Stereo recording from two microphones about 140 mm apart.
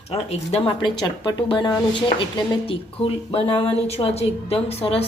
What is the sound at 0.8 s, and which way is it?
A woman's voice, 30° left (ahead or behind).